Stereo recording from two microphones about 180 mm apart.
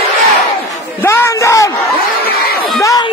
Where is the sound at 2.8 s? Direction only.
20° left (ahead or behind).